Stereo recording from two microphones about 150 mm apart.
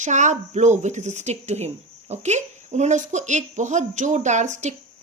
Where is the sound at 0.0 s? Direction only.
50° right (ahead or behind).